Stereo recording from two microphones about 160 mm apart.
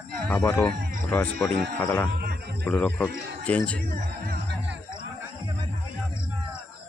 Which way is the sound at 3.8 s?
70° right (ahead or behind).